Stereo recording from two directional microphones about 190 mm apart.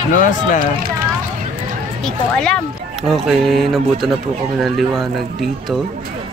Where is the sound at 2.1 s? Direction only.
5° left (ahead or behind).